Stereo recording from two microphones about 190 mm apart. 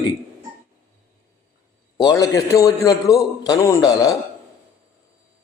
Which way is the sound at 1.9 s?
20° left (ahead or behind).